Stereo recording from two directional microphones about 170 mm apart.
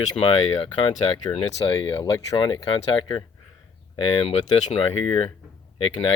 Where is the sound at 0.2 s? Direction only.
35° left (ahead or behind).